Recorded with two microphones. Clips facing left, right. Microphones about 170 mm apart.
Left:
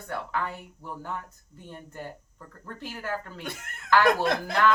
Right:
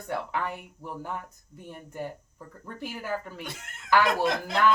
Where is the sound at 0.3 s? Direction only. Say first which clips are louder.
Even; 15° right (ahead or behind).